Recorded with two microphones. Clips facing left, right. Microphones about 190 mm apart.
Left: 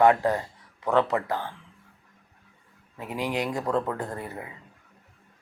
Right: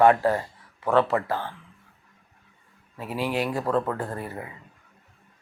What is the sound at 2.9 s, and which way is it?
Speech, 20° left (ahead or behind).